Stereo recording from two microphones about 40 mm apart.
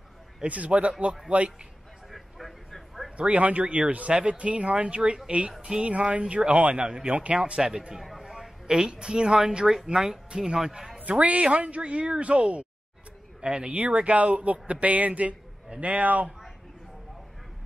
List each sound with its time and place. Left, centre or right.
0.4 s speech: right
2.0 s vehicle: centre
3.2 s speech: right
7.9 s speech: centre
8.2 s a sound: centre
8.6 s speech: centre
10.6 s a man's voice: centre
11.0 s a man's voice: right